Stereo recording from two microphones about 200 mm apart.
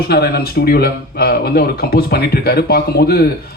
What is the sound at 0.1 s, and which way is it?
A man's voice, 50° left (ahead or behind).